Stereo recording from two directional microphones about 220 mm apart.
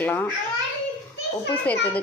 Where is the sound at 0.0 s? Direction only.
10° left (ahead or behind).